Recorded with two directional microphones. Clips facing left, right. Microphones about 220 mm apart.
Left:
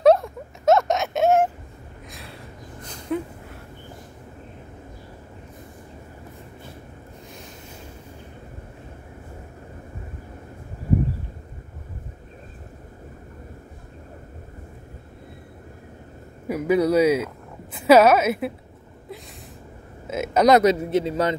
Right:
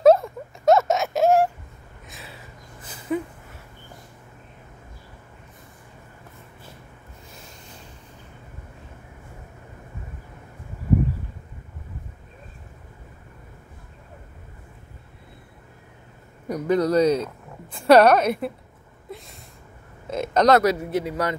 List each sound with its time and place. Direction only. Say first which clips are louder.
0.0 s a sound: right 1 dB; centre (ahead or behind)
16.4 s a woman's voice: left 1 dB; 5° left (ahead or behind)
20.1 s speech: left 1 dB; 5° left (ahead or behind); by 21.4 s 25° left (ahead or behind)